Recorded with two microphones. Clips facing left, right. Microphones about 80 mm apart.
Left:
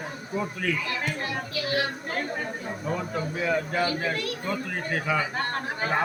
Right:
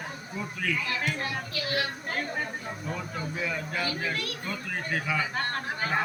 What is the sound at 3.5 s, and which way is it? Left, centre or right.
Speech, left.